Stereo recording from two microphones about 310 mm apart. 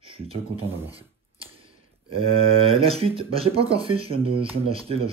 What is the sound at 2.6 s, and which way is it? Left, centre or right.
Speech, centre.